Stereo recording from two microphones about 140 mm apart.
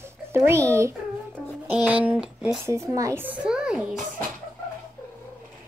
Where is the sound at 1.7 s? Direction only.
10° right (ahead or behind).